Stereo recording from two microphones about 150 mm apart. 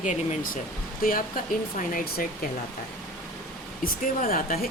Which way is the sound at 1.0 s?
65° left (ahead or behind).